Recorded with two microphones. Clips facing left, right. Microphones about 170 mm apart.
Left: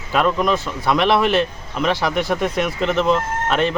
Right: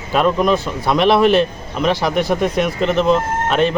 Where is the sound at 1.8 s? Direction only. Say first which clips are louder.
Right 3 dB; 20° right (ahead or behind).